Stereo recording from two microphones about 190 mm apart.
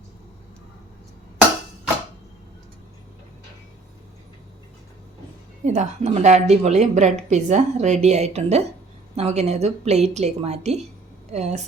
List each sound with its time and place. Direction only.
5.6 s a woman's voice: 40° right (ahead or behind)